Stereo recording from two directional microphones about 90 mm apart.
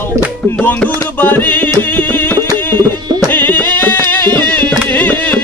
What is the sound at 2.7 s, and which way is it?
Music, 25° left (ahead or behind).